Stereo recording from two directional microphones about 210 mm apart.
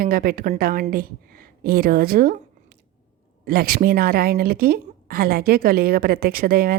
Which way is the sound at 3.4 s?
45° right (ahead or behind).